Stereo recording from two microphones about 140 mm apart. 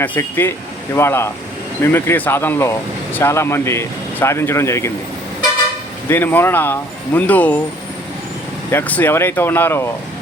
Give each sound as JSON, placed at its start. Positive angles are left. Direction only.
{"t": 0.0, "sound": "speech", "side_deg": 15}
{"t": 6.1, "sound": "speech", "side_deg": 15}
{"t": 8.7, "sound": "speech", "side_deg": 10}